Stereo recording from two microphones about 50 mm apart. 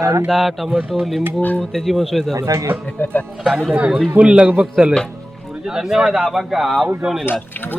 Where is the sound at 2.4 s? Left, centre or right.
Right.